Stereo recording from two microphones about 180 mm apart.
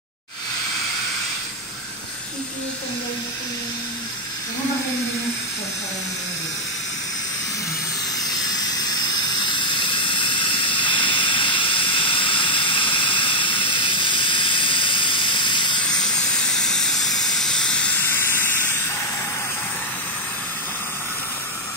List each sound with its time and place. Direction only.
8.5 s squeal: 20° left (ahead or behind)
15.8 s steam: 5° left (ahead or behind)